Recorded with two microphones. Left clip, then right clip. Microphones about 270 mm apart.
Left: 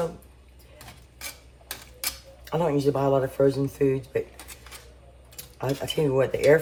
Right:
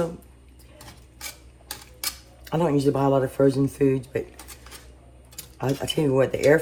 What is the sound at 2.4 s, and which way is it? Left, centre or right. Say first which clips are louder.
Speech: right 1 dB; right.